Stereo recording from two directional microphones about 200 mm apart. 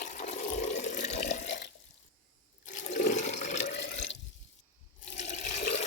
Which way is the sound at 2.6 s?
40° left (ahead or behind).